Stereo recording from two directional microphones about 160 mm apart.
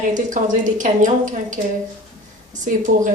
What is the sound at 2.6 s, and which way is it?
Speech, 50° right (ahead or behind).